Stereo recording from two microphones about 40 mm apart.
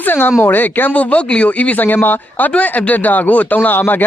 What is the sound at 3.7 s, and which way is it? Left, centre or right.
Speech, left.